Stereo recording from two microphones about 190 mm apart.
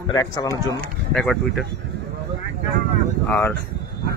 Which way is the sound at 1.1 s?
5° left (ahead or behind).